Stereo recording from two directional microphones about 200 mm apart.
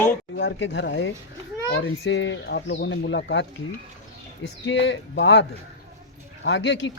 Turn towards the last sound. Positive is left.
turn(degrees=65)  # may be behind; listen again after turning